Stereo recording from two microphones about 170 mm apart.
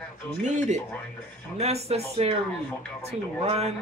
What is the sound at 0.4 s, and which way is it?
Speech, 45° right (ahead or behind).